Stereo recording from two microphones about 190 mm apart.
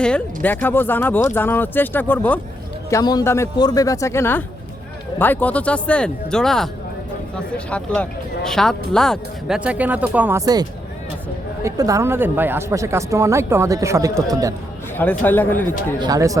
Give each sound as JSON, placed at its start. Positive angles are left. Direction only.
{"t": 0.0, "sound": "speech", "side_deg": 5}
{"t": 2.9, "sound": "speech", "side_deg": 20}
{"t": 14.9, "sound": "speech", "side_deg": 10}
{"t": 16.0, "sound": "speech", "side_deg": -20}